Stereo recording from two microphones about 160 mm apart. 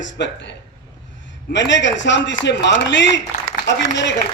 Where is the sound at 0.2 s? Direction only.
90° left.